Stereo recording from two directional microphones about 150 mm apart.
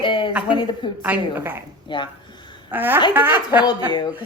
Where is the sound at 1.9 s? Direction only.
30° left (ahead or behind).